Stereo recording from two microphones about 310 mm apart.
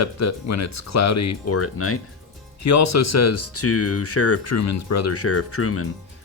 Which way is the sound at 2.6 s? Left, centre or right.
Left.